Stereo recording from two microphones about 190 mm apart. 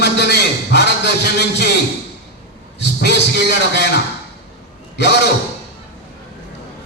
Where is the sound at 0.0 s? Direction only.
60° left (ahead or behind).